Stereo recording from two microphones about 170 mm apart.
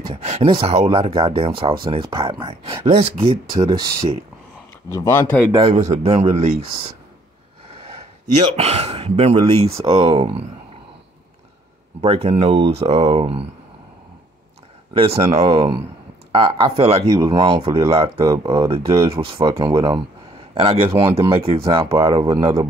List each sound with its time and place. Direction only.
0.1 s speech: 40° right (ahead or behind)
3.6 s speech: 25° right (ahead or behind)
4.8 s speech: 15° left (ahead or behind)
5.5 s speech: 35° right (ahead or behind)
8.4 s speech: 35° right (ahead or behind)
12.0 s speech: 35° right (ahead or behind)
15.0 s speech: 35° right (ahead or behind)
18.4 s speech: 20° right (ahead or behind)
18.7 s speech: 35° right (ahead or behind)